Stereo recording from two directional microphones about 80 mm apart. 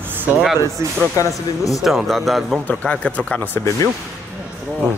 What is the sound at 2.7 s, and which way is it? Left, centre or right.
Speech, centre.